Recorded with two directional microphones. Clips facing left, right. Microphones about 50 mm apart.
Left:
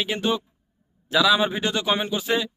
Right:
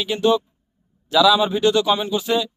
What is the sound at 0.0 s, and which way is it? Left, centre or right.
Speech, left.